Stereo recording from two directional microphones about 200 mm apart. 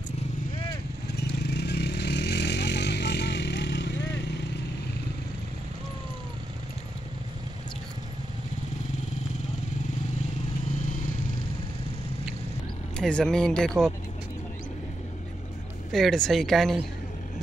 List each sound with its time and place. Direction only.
1.1 s vehicle: 55° left (ahead or behind)
12.9 s speech: 5° left (ahead or behind)
15.9 s speech: centre (ahead or behind)